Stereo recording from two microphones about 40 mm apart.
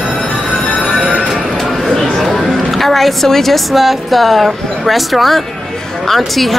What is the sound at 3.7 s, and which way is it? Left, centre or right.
Speech, centre.